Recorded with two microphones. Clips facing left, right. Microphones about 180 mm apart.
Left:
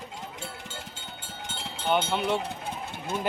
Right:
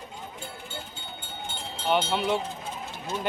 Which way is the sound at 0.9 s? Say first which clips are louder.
Right 2 dB; 90° left.